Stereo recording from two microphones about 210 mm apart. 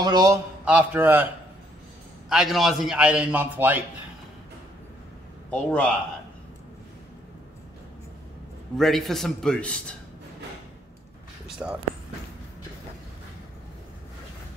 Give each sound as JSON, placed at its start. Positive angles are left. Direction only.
{"t": 0.0, "sound": "a man's voice", "side_deg": -20}
{"t": 0.7, "sound": "a man's voice", "side_deg": -10}
{"t": 5.5, "sound": "a man's voice", "side_deg": 5}
{"t": 8.7, "sound": "a man's voice", "side_deg": 0}
{"t": 11.4, "sound": "a man's voice", "side_deg": -5}